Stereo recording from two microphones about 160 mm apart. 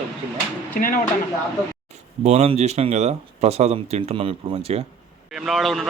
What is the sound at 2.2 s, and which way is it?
Speech, 40° right (ahead or behind).